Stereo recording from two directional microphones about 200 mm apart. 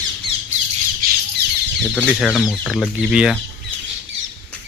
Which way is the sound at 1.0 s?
45° right (ahead or behind).